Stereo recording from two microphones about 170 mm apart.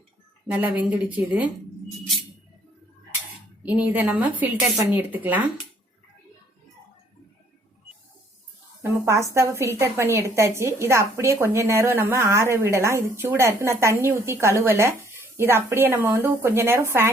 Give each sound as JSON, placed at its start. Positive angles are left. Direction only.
{"t": 0.5, "sound": "a woman's voice", "side_deg": -10}
{"t": 3.6, "sound": "a woman's voice", "side_deg": -10}
{"t": 8.8, "sound": "a woman's voice", "side_deg": -15}